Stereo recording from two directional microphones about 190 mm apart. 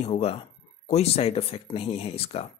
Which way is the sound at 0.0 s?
30° left (ahead or behind).